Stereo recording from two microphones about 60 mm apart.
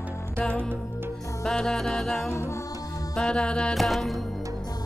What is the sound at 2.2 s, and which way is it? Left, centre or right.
Music, left.